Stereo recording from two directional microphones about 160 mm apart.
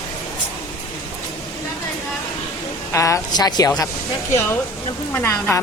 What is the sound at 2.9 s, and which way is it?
Speech, 20° left (ahead or behind).